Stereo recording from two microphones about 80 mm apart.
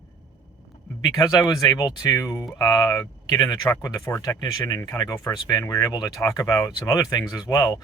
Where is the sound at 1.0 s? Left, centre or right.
Left.